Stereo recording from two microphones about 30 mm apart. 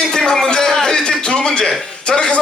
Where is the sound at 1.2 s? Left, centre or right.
Left.